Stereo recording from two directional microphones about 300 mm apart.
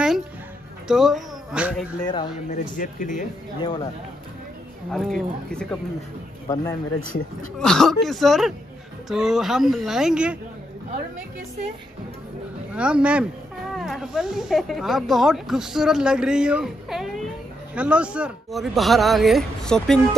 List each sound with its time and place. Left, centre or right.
0.8 s speech: centre
2.0 s a man's voice: centre
2.5 s speech: left
3.6 s a man's voice: centre
4.9 s a man's voice: centre
7.5 s speech: centre
12.7 s speech: centre